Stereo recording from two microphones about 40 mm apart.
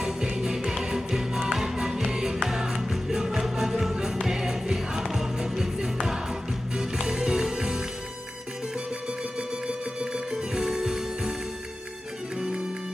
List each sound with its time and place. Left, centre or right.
0.3 s music: centre
9.6 s music: right